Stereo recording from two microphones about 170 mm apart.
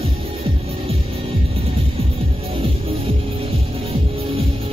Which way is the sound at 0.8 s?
35° right (ahead or behind).